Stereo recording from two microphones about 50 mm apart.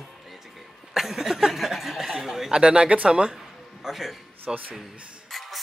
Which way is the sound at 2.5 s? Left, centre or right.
Centre.